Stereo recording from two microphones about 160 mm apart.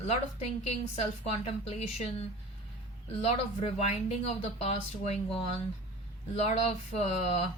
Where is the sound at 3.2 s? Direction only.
40° left (ahead or behind).